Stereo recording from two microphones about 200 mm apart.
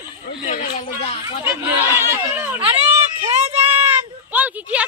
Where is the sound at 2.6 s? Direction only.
30° right (ahead or behind).